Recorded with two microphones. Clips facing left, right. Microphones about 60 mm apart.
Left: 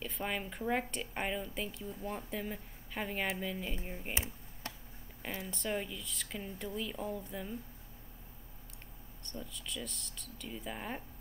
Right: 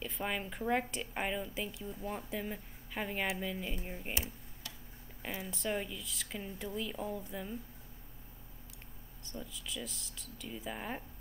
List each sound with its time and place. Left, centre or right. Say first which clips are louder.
0.0 s speech: even; centre
4.6 s a sound: left 5 dB; left
5.2 s speech: right 1 dB; centre
9.2 s speech: even; centre